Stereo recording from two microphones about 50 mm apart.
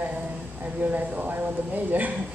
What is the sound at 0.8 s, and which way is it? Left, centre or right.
Speech, right.